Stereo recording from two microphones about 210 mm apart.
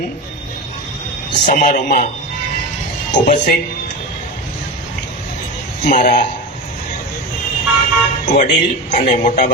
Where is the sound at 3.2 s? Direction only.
35° left (ahead or behind).